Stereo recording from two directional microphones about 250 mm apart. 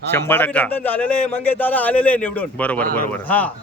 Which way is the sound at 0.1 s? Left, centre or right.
Centre.